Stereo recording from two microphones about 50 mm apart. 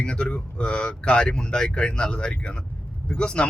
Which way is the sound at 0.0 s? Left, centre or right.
Left.